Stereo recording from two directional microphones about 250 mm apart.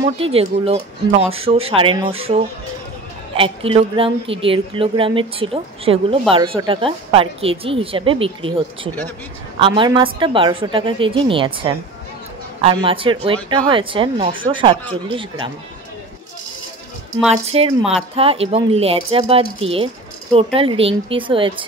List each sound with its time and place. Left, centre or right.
0.2 s speech: right
17.3 s speech: right